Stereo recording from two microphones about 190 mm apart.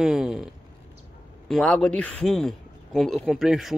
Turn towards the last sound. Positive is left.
turn(degrees=0)  # may be behind; listen again after turning